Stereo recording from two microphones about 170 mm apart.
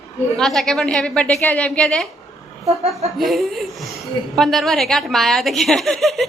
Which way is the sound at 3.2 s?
Centre (ahead or behind).